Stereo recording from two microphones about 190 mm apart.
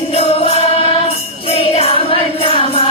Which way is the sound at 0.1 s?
30° left (ahead or behind).